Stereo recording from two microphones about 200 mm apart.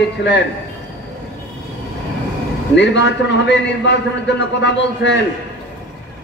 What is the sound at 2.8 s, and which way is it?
A man's voice, 60° left (ahead or behind).